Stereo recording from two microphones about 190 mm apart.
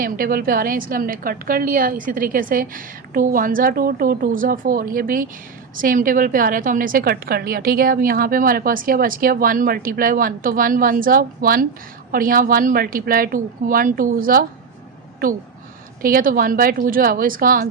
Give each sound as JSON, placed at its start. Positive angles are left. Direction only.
{"t": 0.0, "sound": "a woman's voice", "side_deg": -50}
{"t": 16.0, "sound": "a woman's voice", "side_deg": -50}